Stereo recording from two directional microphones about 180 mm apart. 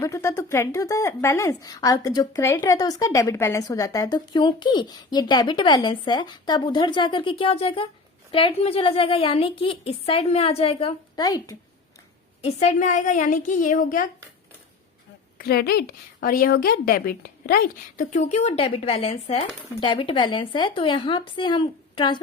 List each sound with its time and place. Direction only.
0.0 s a woman's voice: 15° left (ahead or behind)
12.4 s a woman's voice: 35° left (ahead or behind)
15.4 s a woman's voice: 60° left (ahead or behind); by 22.2 s 25° left (ahead or behind)